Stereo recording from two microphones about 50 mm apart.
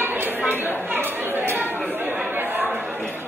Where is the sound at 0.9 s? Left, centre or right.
Right.